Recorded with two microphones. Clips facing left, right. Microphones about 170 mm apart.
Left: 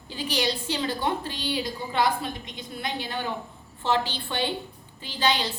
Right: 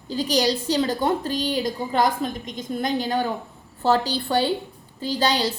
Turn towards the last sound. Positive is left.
turn(degrees=-40)  # may be behind; listen again after turning